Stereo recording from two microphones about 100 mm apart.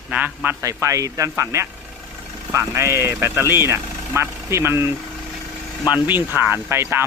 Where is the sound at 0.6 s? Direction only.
30° right (ahead or behind).